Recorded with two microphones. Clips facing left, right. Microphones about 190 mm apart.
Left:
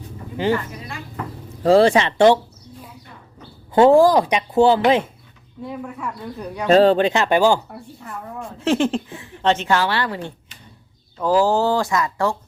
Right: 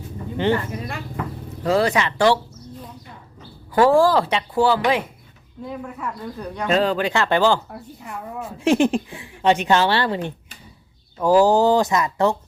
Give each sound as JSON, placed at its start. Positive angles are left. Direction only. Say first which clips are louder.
{"t": 1.6, "sound": "a woman's voice", "louder": "left 6 dB", "side_deg": 30}
{"t": 3.7, "sound": "a woman's voice", "louder": "left 3 dB", "side_deg": 25}
{"t": 5.6, "sound": "speech", "louder": "left 1 dB", "side_deg": 0}
{"t": 6.7, "sound": "a woman's voice", "louder": "left 7 dB", "side_deg": 30}
{"t": 8.0, "sound": "speech", "louder": "right 1 dB", "side_deg": -10}